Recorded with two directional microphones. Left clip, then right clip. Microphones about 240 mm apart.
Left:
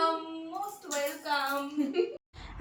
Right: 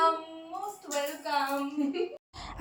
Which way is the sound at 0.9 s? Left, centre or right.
Centre.